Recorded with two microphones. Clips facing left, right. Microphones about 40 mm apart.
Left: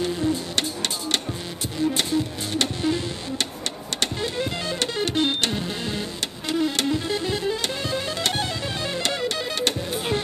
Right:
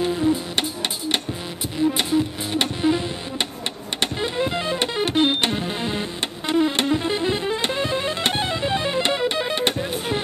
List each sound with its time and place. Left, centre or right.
0.0 s printer: centre
1.9 s music: centre